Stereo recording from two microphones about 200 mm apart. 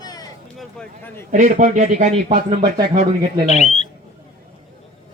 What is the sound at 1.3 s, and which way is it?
Speech, 40° right (ahead or behind).